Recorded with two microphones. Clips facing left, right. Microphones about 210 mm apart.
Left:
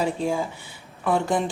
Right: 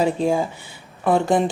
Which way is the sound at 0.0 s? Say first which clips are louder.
Right 5 dB; 25° right (ahead or behind).